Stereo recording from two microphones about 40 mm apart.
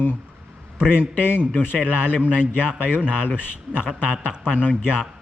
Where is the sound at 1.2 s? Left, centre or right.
Left.